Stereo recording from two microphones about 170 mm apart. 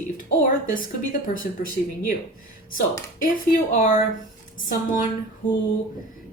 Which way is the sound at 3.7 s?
45° left (ahead or behind).